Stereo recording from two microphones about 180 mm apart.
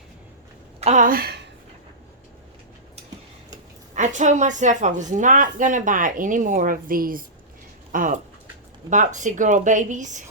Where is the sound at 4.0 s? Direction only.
40° right (ahead or behind).